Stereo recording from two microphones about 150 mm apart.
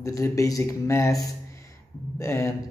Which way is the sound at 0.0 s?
20° left (ahead or behind).